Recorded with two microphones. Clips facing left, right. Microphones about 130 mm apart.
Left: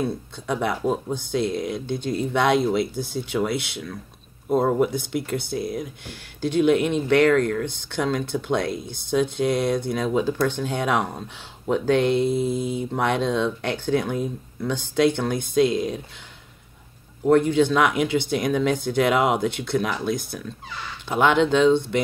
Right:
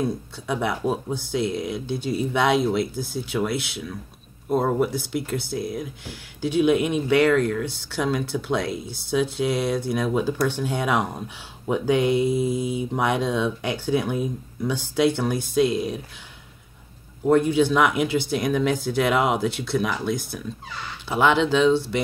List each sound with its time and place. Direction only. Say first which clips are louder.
0.5 s speech: left 1 dB; 5° right (ahead or behind)
7.4 s speech: even; 55° left (ahead or behind)
7.9 s speech: even; 5° right (ahead or behind)
17.2 s speech: left 1 dB; 5° right (ahead or behind)